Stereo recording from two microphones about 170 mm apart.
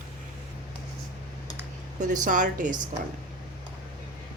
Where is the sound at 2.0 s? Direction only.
45° right (ahead or behind).